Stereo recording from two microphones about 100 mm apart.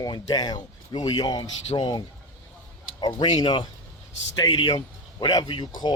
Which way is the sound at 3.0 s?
50° left (ahead or behind).